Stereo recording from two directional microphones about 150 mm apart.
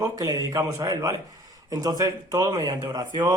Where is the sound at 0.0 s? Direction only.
25° right (ahead or behind).